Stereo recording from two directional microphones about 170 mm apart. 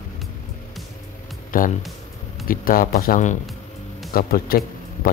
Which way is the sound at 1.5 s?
55° left (ahead or behind).